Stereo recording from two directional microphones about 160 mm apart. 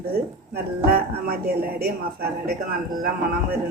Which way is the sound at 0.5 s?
70° right (ahead or behind).